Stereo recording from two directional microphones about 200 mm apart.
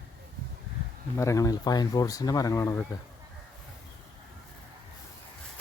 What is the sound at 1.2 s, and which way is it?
Speech, 15° left (ahead or behind).